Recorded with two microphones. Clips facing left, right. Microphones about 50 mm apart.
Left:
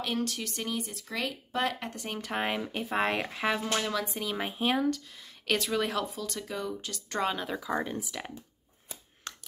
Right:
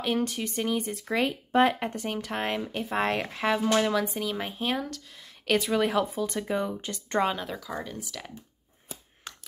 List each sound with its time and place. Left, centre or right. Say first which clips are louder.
0.0 s speech: right 4 dB; centre
1.0 s speech: right 7 dB; right
2.0 s speech: right 2 dB; centre
3.6 s speech: right 6 dB; centre
4.1 s speech: right 2 dB; centre
5.5 s speech: right 4 dB; centre
6.1 s speech: right 7 dB; right
7.2 s speech: right 2 dB; centre
7.6 s speech: left 4 dB; centre
9.3 s a sound: even; centre